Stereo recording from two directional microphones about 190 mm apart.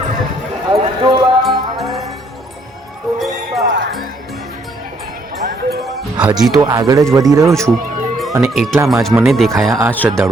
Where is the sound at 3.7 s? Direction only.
70° right (ahead or behind).